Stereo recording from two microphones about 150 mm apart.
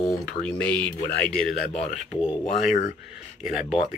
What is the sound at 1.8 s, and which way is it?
Speech, 45° left (ahead or behind).